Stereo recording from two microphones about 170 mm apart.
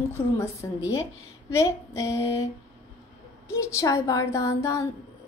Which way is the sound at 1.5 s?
15° left (ahead or behind).